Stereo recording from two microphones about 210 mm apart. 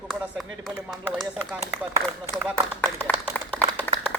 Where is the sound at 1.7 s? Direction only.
15° right (ahead or behind).